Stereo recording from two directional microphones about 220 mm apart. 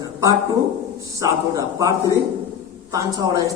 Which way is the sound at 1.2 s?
15° right (ahead or behind).